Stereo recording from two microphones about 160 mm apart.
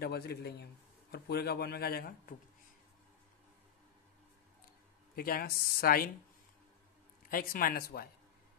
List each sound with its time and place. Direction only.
0.0 s speech: 80° left
5.1 s speech: 70° left (ahead or behind)
7.2 s speech: 65° left (ahead or behind)